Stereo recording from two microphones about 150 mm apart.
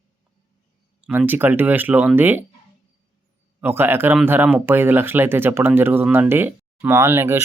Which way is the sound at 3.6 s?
15° right (ahead or behind).